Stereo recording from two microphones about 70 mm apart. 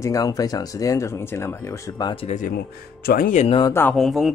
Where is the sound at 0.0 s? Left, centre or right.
Left.